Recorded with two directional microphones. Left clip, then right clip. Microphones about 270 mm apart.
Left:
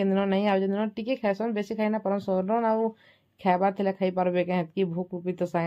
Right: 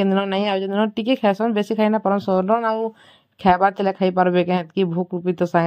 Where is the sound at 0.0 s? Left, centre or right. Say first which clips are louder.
Right 5 dB; centre.